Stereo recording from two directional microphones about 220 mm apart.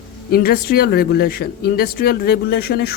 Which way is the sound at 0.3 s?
45° left (ahead or behind).